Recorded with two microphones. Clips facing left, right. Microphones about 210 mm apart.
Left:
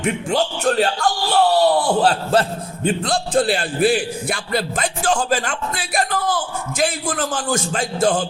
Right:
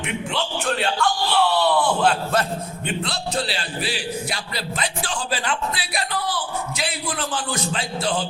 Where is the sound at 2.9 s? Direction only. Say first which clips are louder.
Left 7 dB; 50° left (ahead or behind).